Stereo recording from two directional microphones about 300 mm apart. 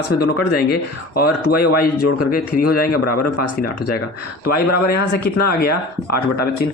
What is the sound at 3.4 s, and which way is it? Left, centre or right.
Speech, left.